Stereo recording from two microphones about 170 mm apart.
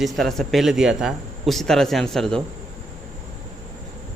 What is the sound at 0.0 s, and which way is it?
Speech, centre (ahead or behind).